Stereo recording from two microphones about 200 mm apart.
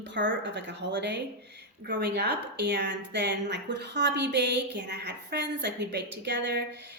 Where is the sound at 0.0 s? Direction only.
65° right (ahead or behind).